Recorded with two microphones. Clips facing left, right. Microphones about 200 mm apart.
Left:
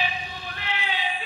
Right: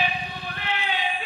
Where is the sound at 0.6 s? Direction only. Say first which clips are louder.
Right 2 dB; 55° right (ahead or behind).